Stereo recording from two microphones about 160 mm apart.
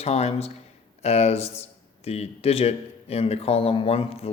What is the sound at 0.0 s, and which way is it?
Speech, 40° left (ahead or behind).